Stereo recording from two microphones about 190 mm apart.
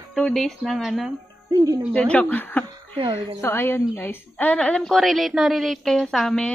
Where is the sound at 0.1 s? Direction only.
Centre (ahead or behind).